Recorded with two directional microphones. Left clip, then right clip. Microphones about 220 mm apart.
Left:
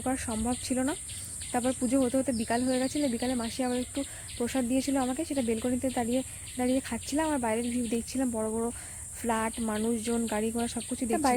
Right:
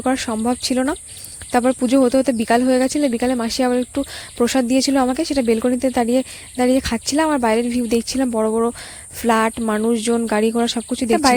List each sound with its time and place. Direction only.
0.0 s speech: 40° right (ahead or behind)